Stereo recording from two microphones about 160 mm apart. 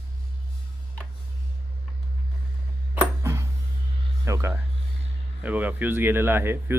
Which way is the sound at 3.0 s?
15° right (ahead or behind).